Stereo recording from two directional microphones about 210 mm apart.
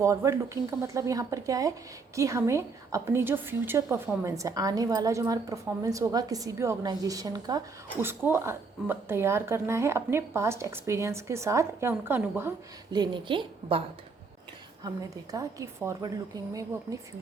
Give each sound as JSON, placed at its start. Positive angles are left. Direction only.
{"t": 0.0, "sound": "a woman's voice", "side_deg": -15}
{"t": 14.8, "sound": "a woman's voice", "side_deg": -15}